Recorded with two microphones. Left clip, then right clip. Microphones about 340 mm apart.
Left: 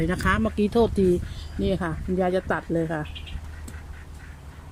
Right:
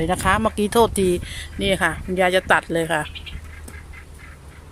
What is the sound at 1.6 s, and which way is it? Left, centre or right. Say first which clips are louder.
Speech: right 7 dB; right.